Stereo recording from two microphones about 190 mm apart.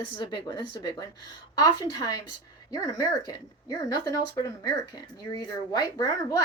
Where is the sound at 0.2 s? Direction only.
20° left (ahead or behind).